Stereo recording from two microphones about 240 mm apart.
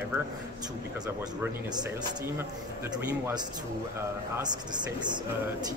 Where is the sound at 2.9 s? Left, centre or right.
Centre.